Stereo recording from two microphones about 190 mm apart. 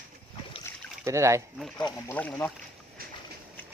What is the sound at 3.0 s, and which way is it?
Train, 50° right (ahead or behind).